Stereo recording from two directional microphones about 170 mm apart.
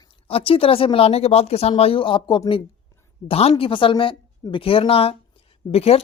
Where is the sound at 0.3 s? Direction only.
35° left (ahead or behind).